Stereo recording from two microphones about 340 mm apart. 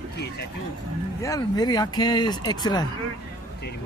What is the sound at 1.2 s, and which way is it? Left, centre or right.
Speech, centre.